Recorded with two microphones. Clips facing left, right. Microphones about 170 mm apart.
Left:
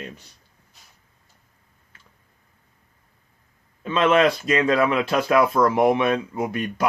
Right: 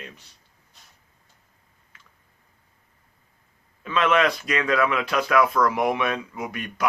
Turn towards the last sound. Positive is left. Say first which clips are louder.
# left 6 dB
turn(degrees=30)  # may be behind; listen again after turning